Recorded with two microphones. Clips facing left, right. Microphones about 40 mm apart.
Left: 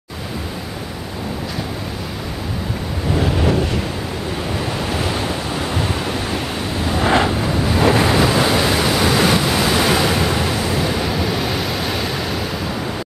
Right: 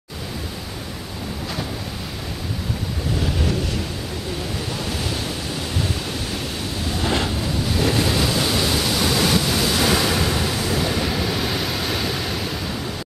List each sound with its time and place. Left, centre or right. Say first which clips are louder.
3.2 s waves: left 7 dB; left
4.7 s waves: left 5 dB; left; by 12.4 s centre